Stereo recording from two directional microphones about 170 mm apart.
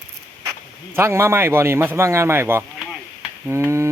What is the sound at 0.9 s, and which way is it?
A man's voice, 15° right (ahead or behind).